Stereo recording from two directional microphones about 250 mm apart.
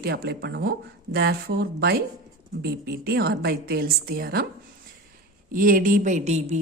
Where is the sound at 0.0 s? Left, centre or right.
Right.